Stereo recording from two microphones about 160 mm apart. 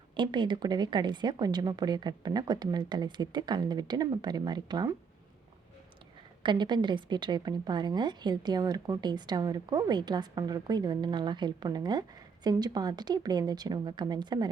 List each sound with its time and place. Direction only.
0.2 s a woman's voice: 30° right (ahead or behind)
6.4 s a woman's voice: 30° right (ahead or behind)